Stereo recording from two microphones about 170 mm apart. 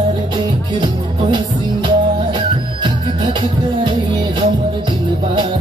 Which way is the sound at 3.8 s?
30° right (ahead or behind).